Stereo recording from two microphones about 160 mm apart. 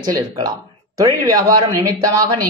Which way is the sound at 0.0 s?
25° right (ahead or behind).